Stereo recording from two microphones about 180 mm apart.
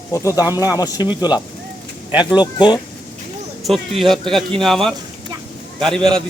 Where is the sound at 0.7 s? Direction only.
20° left (ahead or behind).